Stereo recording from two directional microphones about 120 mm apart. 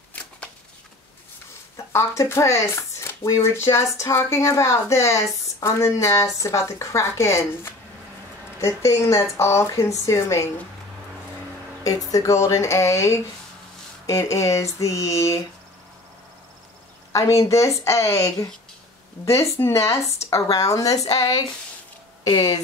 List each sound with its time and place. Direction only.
1.9 s speech: 25° left (ahead or behind)
12.1 s speech: 25° left (ahead or behind)
17.1 s speech: 25° left (ahead or behind)